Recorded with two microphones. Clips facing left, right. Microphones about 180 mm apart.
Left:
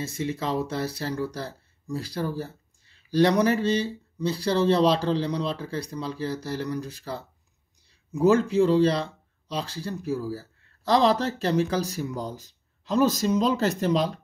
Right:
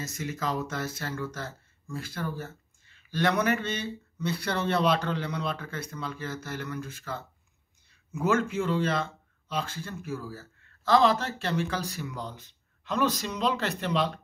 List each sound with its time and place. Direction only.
0.0 s speech: 30° left (ahead or behind)